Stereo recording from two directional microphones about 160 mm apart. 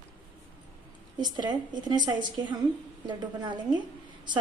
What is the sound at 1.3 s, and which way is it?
A woman's voice, 25° right (ahead or behind).